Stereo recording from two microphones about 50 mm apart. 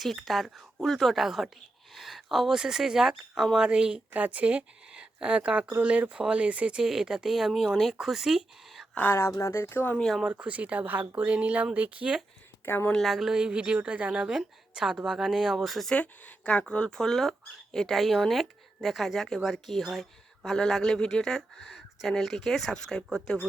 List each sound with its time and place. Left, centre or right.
0.3 s speech: centre
3.7 s speech: centre
4.1 s speech: right
6.8 s speech: centre
9.0 s speech: left
10.0 s speech: centre
10.3 s speech: right
12.6 s speech: left
13.0 s speech: centre
13.4 s speech: right; by 15.9 s centre
15.9 s speech: left
16.9 s speech: centre